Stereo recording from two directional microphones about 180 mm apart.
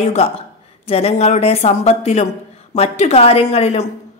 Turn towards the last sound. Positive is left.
turn(degrees=35)  # may be behind; listen again after turning